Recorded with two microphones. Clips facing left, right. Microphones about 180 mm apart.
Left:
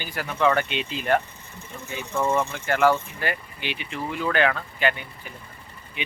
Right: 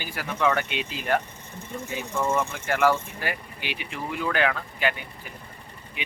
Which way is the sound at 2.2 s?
15° left (ahead or behind).